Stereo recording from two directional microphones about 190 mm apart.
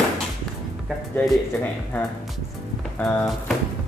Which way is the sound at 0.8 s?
Centre (ahead or behind).